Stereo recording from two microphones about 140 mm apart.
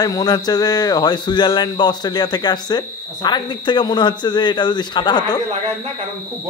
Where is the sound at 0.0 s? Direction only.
30° left (ahead or behind).